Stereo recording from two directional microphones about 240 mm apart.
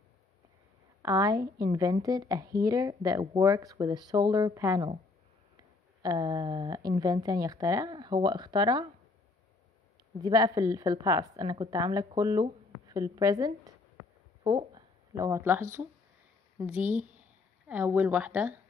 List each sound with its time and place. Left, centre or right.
1.0 s a woman's voice: centre
10.2 s a woman's voice: centre